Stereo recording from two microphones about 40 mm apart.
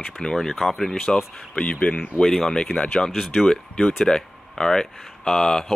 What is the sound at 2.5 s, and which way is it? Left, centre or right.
Speech, left.